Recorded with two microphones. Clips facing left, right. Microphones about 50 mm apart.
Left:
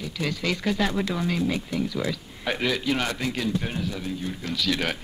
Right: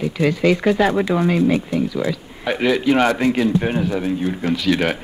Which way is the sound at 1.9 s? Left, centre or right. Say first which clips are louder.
Right 6 dB; centre.